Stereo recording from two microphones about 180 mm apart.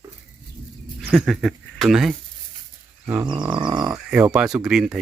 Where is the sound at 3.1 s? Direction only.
20° right (ahead or behind).